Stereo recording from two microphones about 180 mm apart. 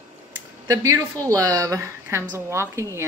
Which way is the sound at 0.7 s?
20° right (ahead or behind).